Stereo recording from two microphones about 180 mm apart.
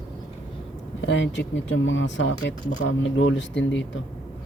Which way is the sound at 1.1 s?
90° left.